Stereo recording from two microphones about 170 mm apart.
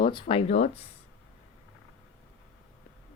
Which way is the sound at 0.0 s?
30° left (ahead or behind).